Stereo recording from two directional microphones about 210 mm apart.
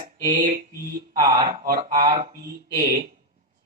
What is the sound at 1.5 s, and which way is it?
Speech, 40° right (ahead or behind).